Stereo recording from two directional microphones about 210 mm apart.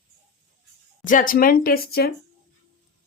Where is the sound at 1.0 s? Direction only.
40° left (ahead or behind).